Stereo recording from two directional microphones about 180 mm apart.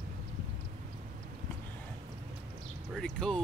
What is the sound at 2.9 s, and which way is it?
Speech, centre (ahead or behind).